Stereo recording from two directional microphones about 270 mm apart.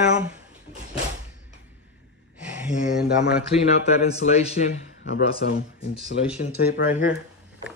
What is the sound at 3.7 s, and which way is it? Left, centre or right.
Speech, left.